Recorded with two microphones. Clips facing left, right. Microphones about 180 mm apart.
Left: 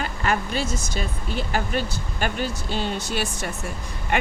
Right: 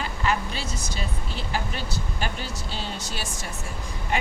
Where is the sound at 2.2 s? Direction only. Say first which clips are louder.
Left 9 dB; 55° left (ahead or behind).